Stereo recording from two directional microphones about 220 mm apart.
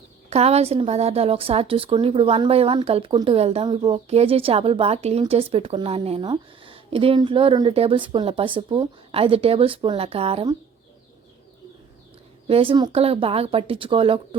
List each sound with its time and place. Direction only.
0.3 s a woman's voice: 30° right (ahead or behind)
12.5 s a woman's voice: 25° right (ahead or behind)